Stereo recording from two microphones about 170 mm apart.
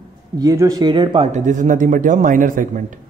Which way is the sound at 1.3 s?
45° right (ahead or behind).